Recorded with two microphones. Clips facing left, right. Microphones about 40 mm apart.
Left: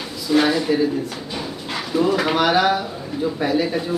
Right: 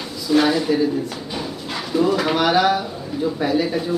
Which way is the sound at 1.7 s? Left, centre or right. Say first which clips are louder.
Even; centre.